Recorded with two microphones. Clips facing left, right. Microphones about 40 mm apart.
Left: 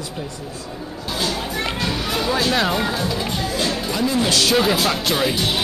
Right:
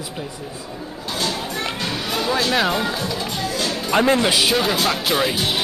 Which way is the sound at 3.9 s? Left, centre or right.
Right.